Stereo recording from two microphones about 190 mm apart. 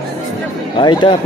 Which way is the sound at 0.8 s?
25° left (ahead or behind).